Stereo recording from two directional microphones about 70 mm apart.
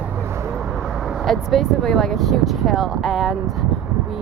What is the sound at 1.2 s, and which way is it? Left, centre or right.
Speech, centre.